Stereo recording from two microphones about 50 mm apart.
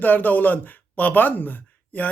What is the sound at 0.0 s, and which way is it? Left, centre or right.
Speech, left.